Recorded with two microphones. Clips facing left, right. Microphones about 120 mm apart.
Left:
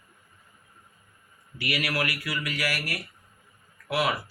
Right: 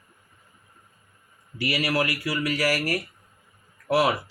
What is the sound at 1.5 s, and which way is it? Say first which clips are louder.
Speech: right 4 dB; 35° right (ahead or behind).